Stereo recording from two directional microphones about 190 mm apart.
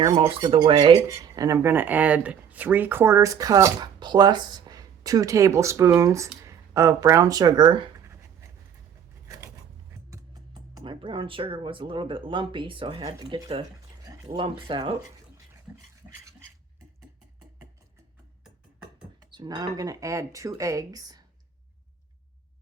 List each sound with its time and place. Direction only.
0.1 s speech: 30° right (ahead or behind)
0.3 s speech: 20° right (ahead or behind)
9.2 s a sound: 15° right (ahead or behind)
10.8 s speech: 25° right (ahead or behind)
15.7 s dog: 5° right (ahead or behind)
16.0 s stir: 20° right (ahead or behind)
19.2 s speech: 20° right (ahead or behind)